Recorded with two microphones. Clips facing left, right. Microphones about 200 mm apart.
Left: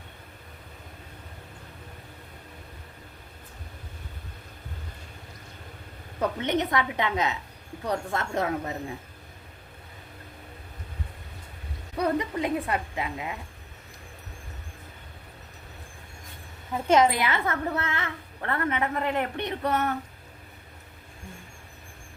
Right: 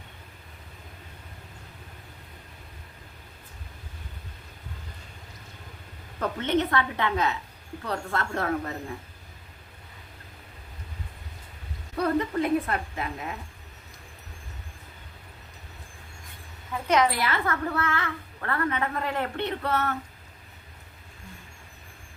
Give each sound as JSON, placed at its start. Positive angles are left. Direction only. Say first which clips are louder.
{"t": 6.1, "sound": "a woman's voice", "louder": "right 1 dB", "side_deg": 15}
{"t": 11.9, "sound": "a woman's voice", "louder": "right 1 dB", "side_deg": 15}
{"t": 16.7, "sound": "a woman's voice", "louder": "left 3 dB", "side_deg": 25}